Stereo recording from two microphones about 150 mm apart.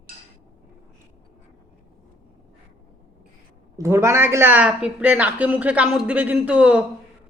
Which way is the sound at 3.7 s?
20° right (ahead or behind).